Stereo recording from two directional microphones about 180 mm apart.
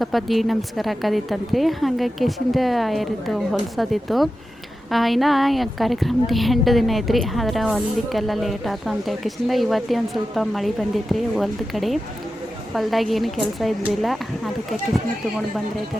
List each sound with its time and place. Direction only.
0.0 s a woman's voice: centre (ahead or behind)